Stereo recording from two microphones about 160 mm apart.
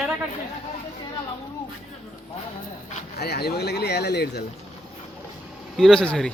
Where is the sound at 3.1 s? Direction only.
85° left.